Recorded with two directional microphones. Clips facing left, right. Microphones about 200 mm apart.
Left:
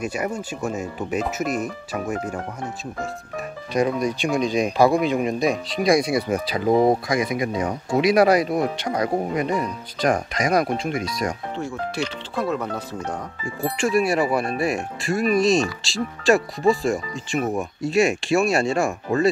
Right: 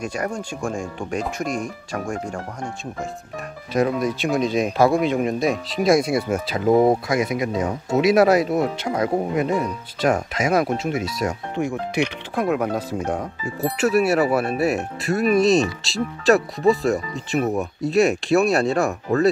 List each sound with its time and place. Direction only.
0.0 s speech: 5° left (ahead or behind)
11.5 s speech: 15° right (ahead or behind); by 19.2 s centre (ahead or behind)